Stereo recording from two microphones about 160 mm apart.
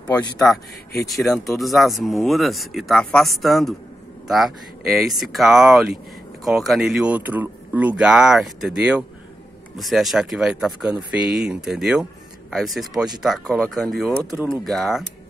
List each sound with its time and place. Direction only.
1.0 s speech: centre (ahead or behind)